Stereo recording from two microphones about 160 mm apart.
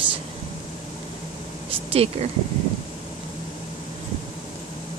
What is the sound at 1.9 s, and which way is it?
Speech, 40° right (ahead or behind).